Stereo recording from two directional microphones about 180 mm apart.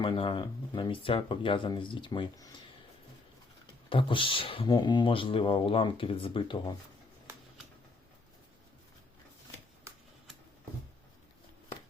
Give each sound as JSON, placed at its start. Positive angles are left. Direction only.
{"t": 0.0, "sound": "speech", "side_deg": 30}
{"t": 3.8, "sound": "speech", "side_deg": 30}